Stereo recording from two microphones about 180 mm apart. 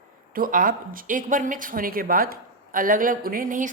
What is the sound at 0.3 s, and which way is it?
Speech, 50° right (ahead or behind).